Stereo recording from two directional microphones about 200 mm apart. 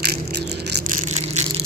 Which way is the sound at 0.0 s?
55° right (ahead or behind).